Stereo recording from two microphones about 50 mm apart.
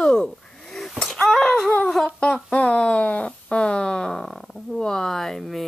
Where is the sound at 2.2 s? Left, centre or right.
Left; by 5.6 s centre.